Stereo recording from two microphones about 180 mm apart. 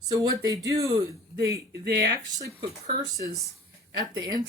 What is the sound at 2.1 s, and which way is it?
Speech, 20° right (ahead or behind).